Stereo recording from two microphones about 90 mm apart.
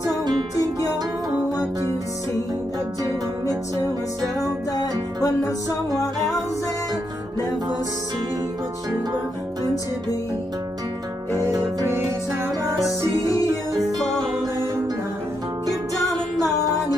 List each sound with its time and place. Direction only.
4.7 s music: 45° left (ahead or behind)
11.3 s music: 35° right (ahead or behind)
16.1 s music: 40° left (ahead or behind)